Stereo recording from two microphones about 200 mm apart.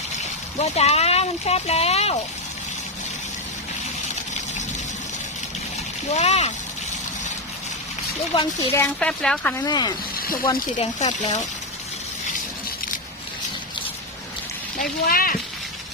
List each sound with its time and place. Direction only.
0.6 s speech: 30° left (ahead or behind)
6.1 s speech: 35° left (ahead or behind)
8.7 s speech: 10° left (ahead or behind)
9.6 s speech: 20° left (ahead or behind)
10.5 s speech: 35° left (ahead or behind)
14.8 s speech: 45° left (ahead or behind)